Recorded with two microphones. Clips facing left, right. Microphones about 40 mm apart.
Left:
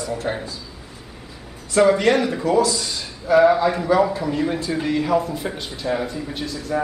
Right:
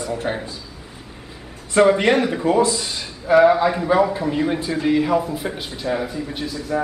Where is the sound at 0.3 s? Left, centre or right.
Centre.